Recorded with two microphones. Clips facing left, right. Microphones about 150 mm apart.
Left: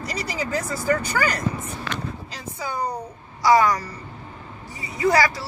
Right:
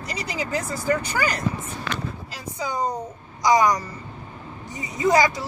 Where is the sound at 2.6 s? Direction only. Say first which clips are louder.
Right 2 dB; 20° right (ahead or behind).